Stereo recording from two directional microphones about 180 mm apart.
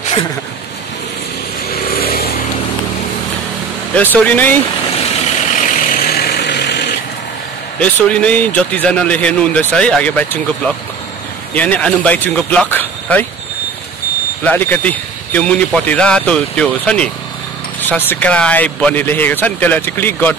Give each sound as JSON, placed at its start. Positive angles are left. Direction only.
{"t": 2.0, "sound": "vehicle", "side_deg": 55}
{"t": 3.9, "sound": "speech", "side_deg": 10}
{"t": 5.6, "sound": "vehicle", "side_deg": 50}
{"t": 7.8, "sound": "speech", "side_deg": 5}
{"t": 14.4, "sound": "speech", "side_deg": 10}